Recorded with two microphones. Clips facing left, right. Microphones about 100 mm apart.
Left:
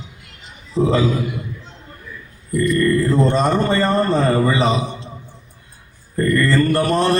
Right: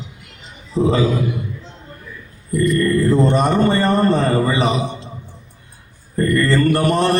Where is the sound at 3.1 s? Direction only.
15° right (ahead or behind).